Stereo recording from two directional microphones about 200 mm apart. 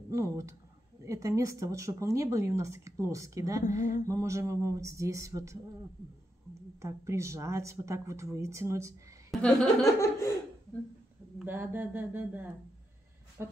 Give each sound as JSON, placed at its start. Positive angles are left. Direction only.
{"t": 0.1, "sound": "speech", "side_deg": -15}
{"t": 3.6, "sound": "a sound", "side_deg": 40}
{"t": 4.1, "sound": "speech", "side_deg": -15}
{"t": 6.8, "sound": "speech", "side_deg": -15}
{"t": 9.3, "sound": "speech", "side_deg": 0}
{"t": 11.3, "sound": "speech", "side_deg": -10}